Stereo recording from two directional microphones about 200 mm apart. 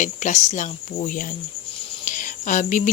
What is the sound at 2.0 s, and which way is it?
Cricket, 40° left (ahead or behind).